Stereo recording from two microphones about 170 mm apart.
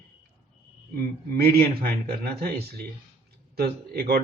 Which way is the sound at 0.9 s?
60° right (ahead or behind).